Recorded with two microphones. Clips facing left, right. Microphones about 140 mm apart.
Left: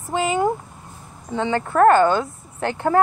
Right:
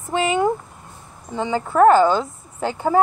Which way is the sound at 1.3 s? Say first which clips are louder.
Left 1 dB; 60° left (ahead or behind).